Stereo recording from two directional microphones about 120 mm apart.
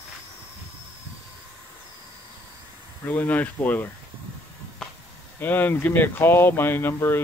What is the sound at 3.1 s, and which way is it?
Speech, 15° left (ahead or behind).